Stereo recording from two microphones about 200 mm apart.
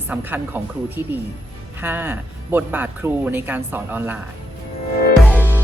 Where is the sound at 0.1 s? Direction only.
10° right (ahead or behind).